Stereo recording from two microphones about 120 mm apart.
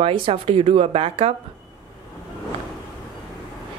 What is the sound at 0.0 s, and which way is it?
A woman's voice, 55° right (ahead or behind).